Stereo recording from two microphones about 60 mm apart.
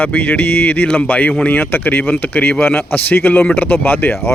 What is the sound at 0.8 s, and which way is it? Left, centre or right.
Speech, centre.